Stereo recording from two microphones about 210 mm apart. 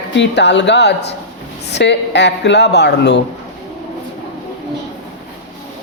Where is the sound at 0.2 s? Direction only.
55° left (ahead or behind).